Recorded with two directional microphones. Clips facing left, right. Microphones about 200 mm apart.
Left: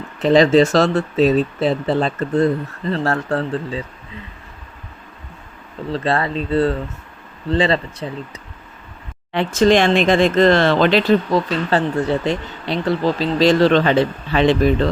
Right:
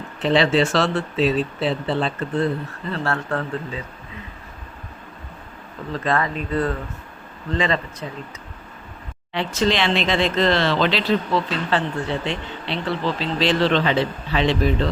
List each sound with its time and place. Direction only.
0.2 s speech: 40° left (ahead or behind)
5.9 s speech: 30° left (ahead or behind)
9.3 s speech: 50° left (ahead or behind)